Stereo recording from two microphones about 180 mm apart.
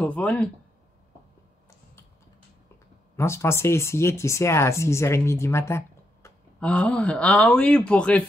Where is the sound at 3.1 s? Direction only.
15° left (ahead or behind).